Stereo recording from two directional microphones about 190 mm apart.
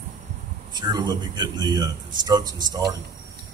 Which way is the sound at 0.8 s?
20° right (ahead or behind).